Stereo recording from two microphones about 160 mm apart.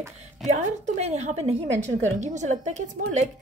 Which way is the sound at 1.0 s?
45° right (ahead or behind).